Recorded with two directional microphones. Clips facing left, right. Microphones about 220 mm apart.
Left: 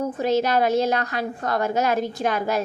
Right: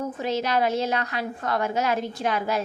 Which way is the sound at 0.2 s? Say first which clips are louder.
Left 4 dB; 45° left (ahead or behind).